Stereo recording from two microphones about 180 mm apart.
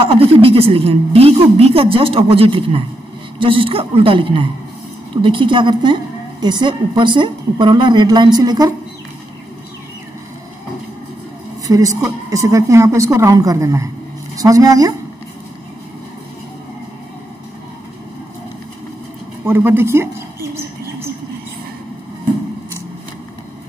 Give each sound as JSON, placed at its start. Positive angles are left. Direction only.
{"t": 0.0, "sound": "a woman's voice", "side_deg": -30}
{"t": 11.6, "sound": "a woman's voice", "side_deg": -20}
{"t": 19.4, "sound": "a woman's voice", "side_deg": -15}